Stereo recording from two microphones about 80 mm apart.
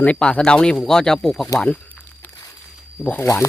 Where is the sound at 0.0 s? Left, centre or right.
Centre.